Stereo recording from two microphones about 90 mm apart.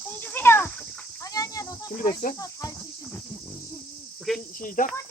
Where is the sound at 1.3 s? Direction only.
40° left (ahead or behind).